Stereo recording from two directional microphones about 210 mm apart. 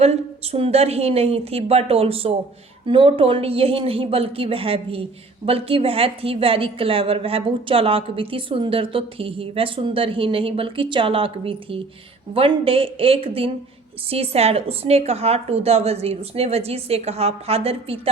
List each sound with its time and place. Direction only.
0.0 s a woman's voice: 30° right (ahead or behind)